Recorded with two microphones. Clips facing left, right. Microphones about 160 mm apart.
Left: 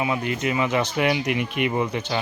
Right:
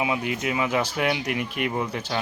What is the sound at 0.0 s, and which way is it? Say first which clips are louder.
Speech: left 1 dB; 5° right (ahead or behind).